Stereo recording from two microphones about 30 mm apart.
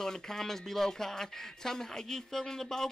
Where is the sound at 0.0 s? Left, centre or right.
Centre.